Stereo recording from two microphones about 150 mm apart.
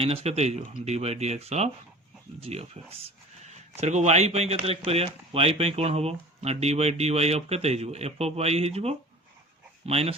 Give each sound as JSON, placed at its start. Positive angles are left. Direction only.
{"t": 0.0, "sound": "speech", "side_deg": -40}